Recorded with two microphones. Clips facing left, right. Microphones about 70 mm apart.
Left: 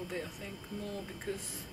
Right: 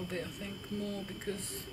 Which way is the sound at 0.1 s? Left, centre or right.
Centre.